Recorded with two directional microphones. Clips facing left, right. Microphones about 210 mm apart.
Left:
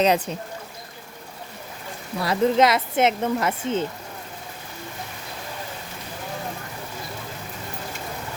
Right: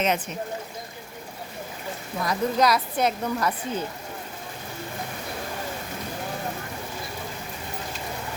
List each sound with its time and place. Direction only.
0.0 s speech: 35° left (ahead or behind)
2.2 s speech: 25° left (ahead or behind)